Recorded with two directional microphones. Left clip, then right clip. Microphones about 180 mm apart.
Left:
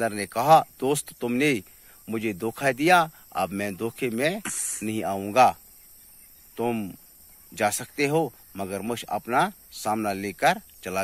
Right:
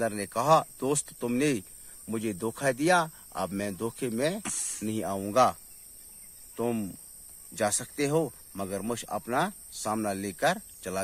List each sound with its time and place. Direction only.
0.0 s speech: 20° left (ahead or behind)